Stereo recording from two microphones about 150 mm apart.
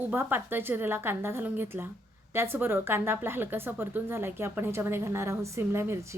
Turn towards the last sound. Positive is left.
turn(degrees=-15)  # may be behind; listen again after turning